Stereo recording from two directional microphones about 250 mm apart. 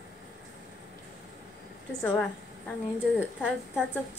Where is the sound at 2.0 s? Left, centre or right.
Centre.